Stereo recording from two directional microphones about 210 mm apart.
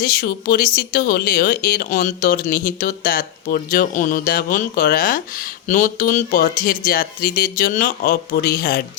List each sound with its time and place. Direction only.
0.0 s speech: 45° left (ahead or behind)